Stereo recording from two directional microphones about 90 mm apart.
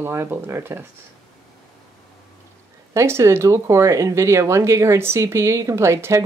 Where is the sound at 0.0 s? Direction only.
25° right (ahead or behind).